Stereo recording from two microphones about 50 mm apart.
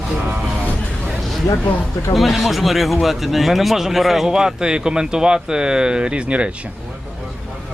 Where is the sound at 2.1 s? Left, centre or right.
Centre; by 6.5 s right.